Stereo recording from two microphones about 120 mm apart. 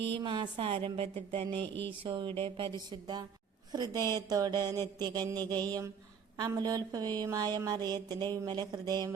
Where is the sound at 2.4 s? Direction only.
45° right (ahead or behind).